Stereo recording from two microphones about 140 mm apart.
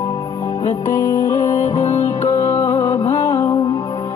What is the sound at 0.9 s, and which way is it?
Music, 20° left (ahead or behind).